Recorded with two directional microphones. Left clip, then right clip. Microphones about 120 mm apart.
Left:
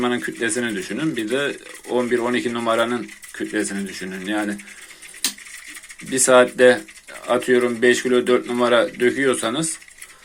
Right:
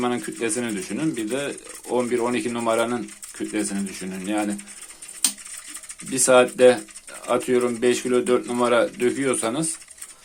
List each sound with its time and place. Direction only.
0.0 s speech: 20° right (ahead or behind)
6.1 s speech: 20° right (ahead or behind)